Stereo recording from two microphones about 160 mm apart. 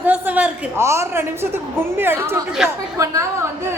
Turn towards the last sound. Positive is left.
turn(degrees=-20)  # may be behind; listen again after turning